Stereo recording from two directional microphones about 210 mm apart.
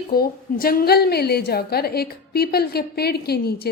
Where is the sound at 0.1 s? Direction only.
45° left (ahead or behind).